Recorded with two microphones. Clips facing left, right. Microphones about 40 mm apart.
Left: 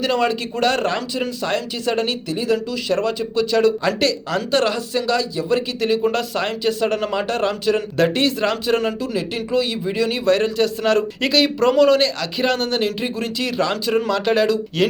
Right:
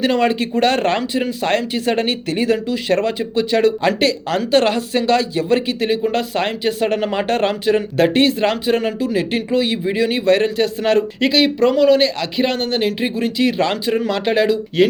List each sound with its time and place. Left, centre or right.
0.0 s speech: right
2.2 s speech: right
2.9 s a man's voice: right
7.3 s a man's voice: right
9.1 s a man's voice: right
11.7 s a man's voice: centre